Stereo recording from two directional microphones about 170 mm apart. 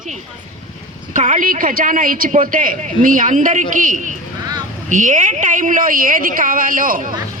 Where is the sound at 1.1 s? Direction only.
45° right (ahead or behind).